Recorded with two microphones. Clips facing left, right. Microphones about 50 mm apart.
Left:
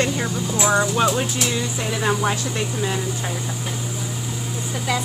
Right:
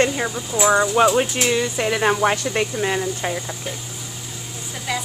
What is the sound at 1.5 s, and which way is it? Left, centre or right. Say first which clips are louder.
Speech: right 4 dB; right.